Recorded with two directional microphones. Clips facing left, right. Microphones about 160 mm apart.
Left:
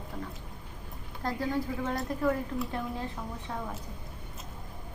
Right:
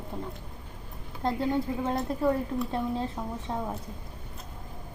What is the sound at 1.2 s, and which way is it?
Speech, 25° right (ahead or behind).